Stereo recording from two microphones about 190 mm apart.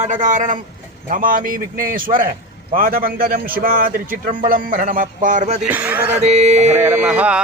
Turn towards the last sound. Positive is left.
turn(degrees=-5)  # may be behind; listen again after turning